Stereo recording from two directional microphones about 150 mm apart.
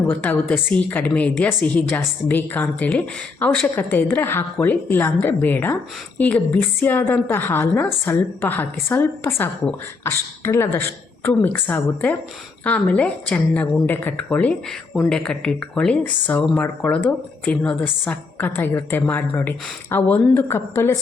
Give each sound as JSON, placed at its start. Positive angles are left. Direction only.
{"t": 0.1, "sound": "a woman's voice", "side_deg": 10}